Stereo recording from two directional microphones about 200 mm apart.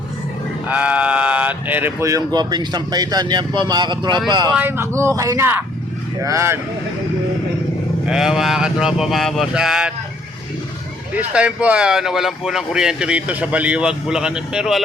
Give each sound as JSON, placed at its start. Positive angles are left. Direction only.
{"t": 0.7, "sound": "speech", "side_deg": -5}
{"t": 4.5, "sound": "speech", "side_deg": -10}
{"t": 8.0, "sound": "speech", "side_deg": -5}
{"t": 11.1, "sound": "speech", "side_deg": -5}